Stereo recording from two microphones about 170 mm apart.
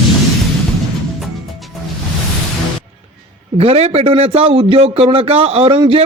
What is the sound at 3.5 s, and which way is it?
A man's voice, 35° right (ahead or behind).